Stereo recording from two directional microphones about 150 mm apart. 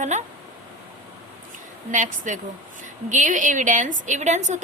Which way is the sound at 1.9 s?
55° right (ahead or behind).